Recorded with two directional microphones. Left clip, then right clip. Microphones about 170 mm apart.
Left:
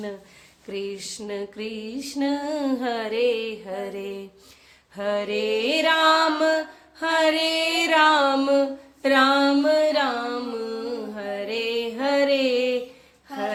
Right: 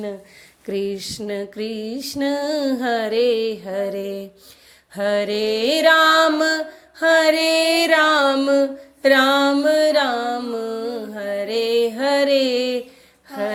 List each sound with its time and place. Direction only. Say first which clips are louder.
0.7 s music: right 7 dB; 25° right (ahead or behind)
2.5 s a sound: right 5 dB; 15° right (ahead or behind)
2.8 s music: right 5 dB; 30° right (ahead or behind)